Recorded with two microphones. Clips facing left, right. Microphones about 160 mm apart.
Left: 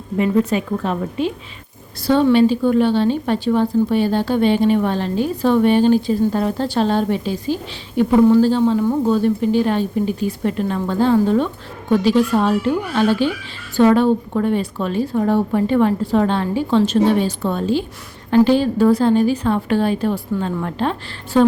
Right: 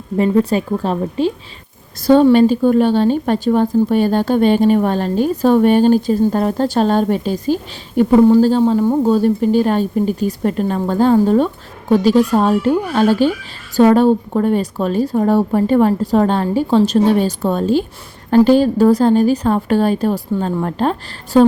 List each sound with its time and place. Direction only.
0.2 s speech: 35° right (ahead or behind)
2.0 s a woman's voice: 45° right (ahead or behind)